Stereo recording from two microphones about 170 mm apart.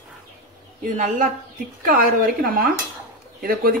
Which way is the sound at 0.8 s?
50° right (ahead or behind).